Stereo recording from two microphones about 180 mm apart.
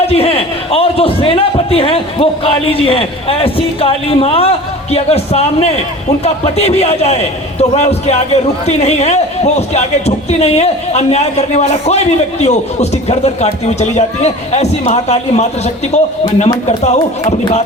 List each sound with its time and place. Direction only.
0.0 s a man's voice: 35° left (ahead or behind)